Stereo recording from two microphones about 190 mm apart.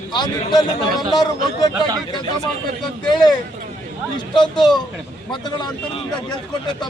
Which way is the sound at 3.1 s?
20° left (ahead or behind).